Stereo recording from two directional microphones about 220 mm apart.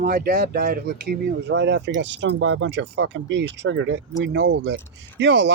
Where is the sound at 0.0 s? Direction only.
40° right (ahead or behind).